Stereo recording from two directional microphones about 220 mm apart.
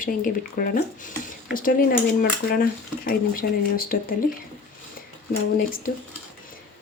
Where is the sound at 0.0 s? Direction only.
40° left (ahead or behind).